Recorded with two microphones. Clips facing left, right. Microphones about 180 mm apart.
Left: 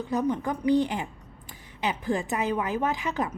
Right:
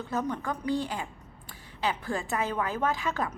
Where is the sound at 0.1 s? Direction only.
15° left (ahead or behind).